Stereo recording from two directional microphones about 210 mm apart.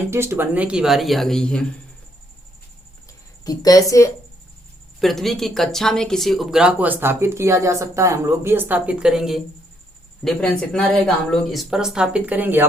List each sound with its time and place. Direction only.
0.1 s speech: 10° right (ahead or behind); by 1.6 s 5° left (ahead or behind)
3.4 s a woman's voice: 15° left (ahead or behind)
4.9 s speech: centre (ahead or behind)